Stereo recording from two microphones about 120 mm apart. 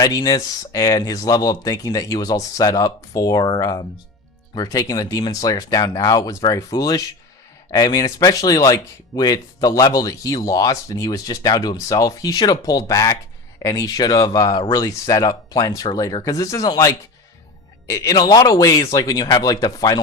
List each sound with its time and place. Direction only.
0.0 s speech: 30° left (ahead or behind)